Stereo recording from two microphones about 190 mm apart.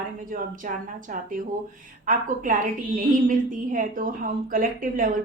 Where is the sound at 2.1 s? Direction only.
45° right (ahead or behind).